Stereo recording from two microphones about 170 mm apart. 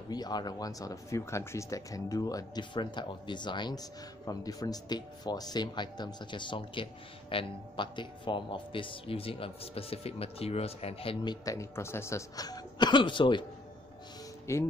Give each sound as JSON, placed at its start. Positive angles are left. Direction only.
{"t": 0.1, "sound": "speech", "side_deg": 25}
{"t": 11.4, "sound": "speech", "side_deg": 20}
{"t": 14.5, "sound": "speech", "side_deg": 15}